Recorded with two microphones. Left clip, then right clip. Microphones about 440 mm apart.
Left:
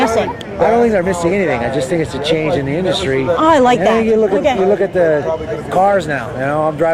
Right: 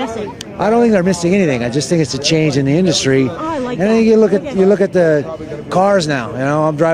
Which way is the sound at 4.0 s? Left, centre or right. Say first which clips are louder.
Right 1 dB; right.